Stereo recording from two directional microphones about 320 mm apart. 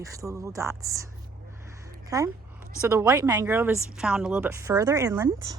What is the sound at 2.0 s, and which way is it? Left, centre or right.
Speech, centre.